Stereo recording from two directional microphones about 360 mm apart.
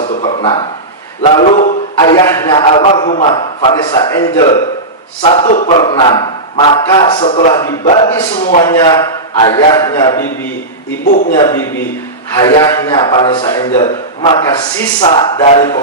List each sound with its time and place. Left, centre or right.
0.0 s a sound: centre
1.2 s speech: centre
11.0 s speech: left